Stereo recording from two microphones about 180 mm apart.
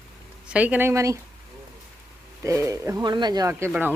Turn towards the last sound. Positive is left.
turn(degrees=-20)  # may be behind; listen again after turning